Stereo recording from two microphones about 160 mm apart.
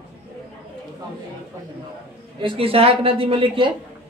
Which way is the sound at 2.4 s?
35° right (ahead or behind).